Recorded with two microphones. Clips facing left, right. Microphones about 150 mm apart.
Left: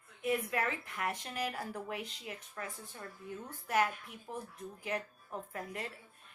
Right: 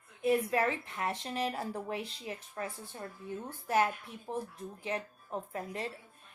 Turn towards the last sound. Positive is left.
turn(degrees=-25)  # may be behind; listen again after turning